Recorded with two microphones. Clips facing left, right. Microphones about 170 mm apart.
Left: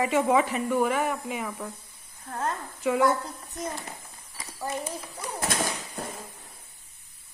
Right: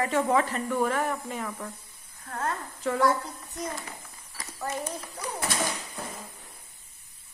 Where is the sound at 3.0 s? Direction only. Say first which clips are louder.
Left 1 dB; 25° left (ahead or behind).